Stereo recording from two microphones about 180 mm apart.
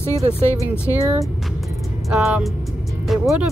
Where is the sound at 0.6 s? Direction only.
15° right (ahead or behind).